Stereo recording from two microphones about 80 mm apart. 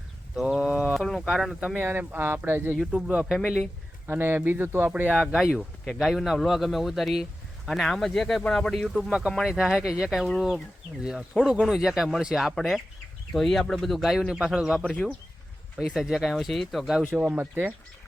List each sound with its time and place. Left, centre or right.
0.4 s speech: centre
0.9 s speech: centre
1.7 s speech: right
2.7 s speech: centre
3.3 s a man's voice: centre
4.0 s speech: right
5.1 s a man's voice: centre
14.8 s a man's voice: centre
15.8 s a man's voice: centre
17.1 s speech: right